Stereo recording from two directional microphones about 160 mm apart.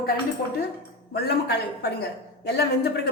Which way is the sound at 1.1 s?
90° left.